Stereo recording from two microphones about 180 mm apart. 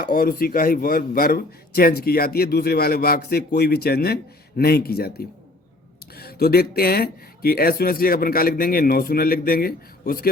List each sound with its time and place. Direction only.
0.0 s a man's voice: 55° left (ahead or behind)